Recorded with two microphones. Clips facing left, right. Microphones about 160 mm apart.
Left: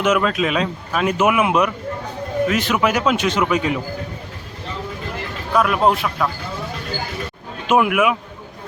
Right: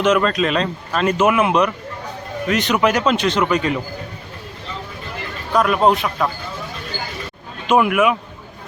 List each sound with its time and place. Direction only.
0.0 s a man's voice: 5° left (ahead or behind)
5.5 s speech: centre (ahead or behind)
7.7 s speech: 5° left (ahead or behind)